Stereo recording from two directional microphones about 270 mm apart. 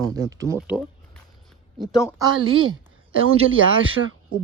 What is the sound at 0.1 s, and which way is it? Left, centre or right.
Speech, centre.